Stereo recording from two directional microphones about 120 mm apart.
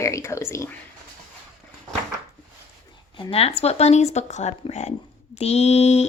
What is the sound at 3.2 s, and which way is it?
Speech, 55° left (ahead or behind).